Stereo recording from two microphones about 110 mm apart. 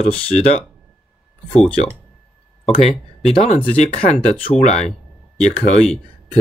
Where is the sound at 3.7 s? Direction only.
60° left (ahead or behind).